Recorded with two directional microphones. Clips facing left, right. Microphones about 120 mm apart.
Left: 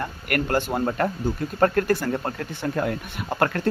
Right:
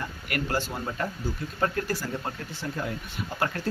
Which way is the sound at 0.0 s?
55° left (ahead or behind).